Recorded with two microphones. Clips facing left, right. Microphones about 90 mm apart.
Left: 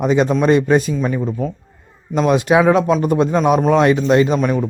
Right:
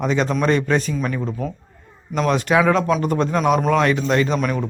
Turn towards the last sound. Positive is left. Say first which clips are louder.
# left 5 dB
turn(degrees=25)  # may be behind; listen again after turning